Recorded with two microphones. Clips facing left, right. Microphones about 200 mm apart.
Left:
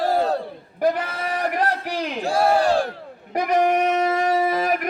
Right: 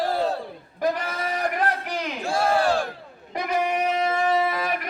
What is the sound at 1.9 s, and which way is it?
Battle cry, 35° left (ahead or behind).